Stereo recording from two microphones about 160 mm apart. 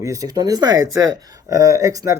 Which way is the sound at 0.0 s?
20° right (ahead or behind).